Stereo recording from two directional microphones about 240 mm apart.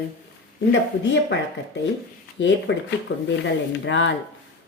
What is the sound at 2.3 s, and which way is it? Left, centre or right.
Speech, left.